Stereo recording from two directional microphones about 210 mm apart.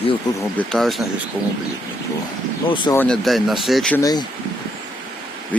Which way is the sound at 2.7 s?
25° left (ahead or behind).